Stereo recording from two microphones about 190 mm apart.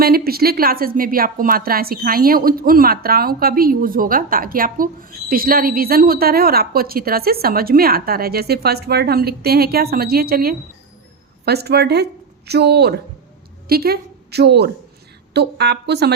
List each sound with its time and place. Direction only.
0.0 s a woman's voice: 55° right (ahead or behind)